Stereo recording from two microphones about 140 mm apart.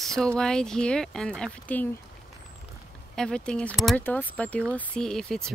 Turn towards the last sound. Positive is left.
turn(degrees=5)  # may be behind; listen again after turning